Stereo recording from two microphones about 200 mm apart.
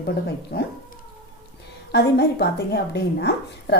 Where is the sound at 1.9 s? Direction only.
55° left (ahead or behind).